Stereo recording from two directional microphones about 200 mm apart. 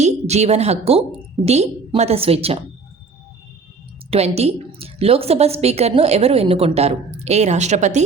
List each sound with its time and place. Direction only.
0.0 s a woman's voice: 35° right (ahead or behind)
4.1 s a woman's voice: 30° right (ahead or behind)